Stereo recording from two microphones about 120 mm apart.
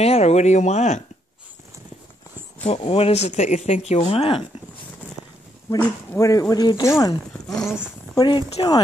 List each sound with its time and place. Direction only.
0.0 s speech: 60° left (ahead or behind)
2.6 s speech: 60° left (ahead or behind)
6.1 s speech: 25° left (ahead or behind)
7.6 s speech: 5° right (ahead or behind)
8.2 s speech: 40° left (ahead or behind)